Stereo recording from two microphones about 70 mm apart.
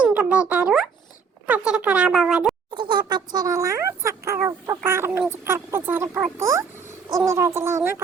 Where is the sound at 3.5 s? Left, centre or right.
Right.